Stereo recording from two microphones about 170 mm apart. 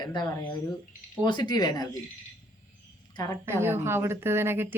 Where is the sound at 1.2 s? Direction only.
25° left (ahead or behind).